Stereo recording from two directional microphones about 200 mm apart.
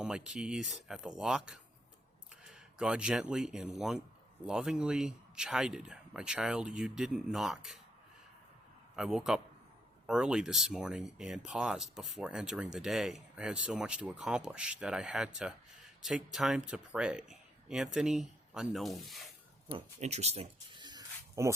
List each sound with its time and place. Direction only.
0.0 s speech: 5° right (ahead or behind)
9.0 s speech: 5° right (ahead or behind)
19.6 s speech: 35° right (ahead or behind); by 21.5 s 15° right (ahead or behind)